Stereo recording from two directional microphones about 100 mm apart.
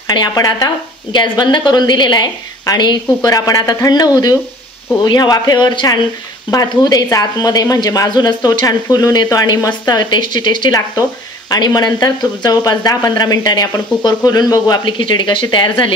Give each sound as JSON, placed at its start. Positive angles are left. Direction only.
{"t": 0.1, "sound": "a woman's voice", "side_deg": 45}